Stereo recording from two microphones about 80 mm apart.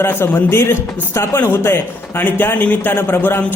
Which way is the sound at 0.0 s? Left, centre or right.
Left.